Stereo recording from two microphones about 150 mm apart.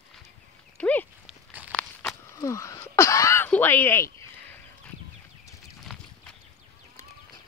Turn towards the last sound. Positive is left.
turn(degrees=5)  # may be behind; listen again after turning